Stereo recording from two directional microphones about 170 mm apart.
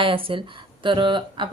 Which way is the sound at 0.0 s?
30° right (ahead or behind).